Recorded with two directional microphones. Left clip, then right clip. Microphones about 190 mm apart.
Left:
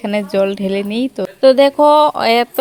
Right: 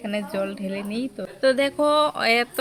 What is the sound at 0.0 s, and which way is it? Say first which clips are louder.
Speech: left 11 dB; 40° left (ahead or behind).